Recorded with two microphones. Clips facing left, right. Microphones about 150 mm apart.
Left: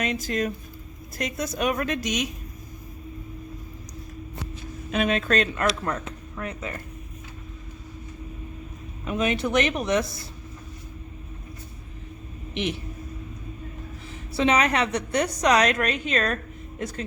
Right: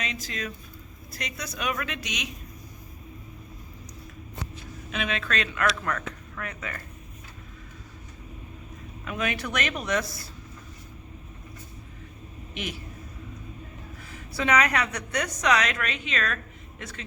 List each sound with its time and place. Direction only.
0.0 s a woman's voice: 50° left (ahead or behind)
4.9 s a woman's voice: 40° left (ahead or behind)
5.6 s speech: 25° left (ahead or behind)
9.0 s speech: 25° left (ahead or behind)
14.1 s a woman's voice: 25° left (ahead or behind)